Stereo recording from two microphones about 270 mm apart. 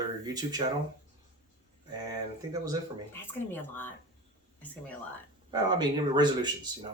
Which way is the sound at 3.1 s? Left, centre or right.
Centre.